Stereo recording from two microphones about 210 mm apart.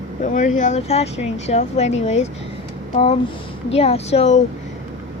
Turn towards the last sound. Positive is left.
turn(degrees=30)  # may be behind; listen again after turning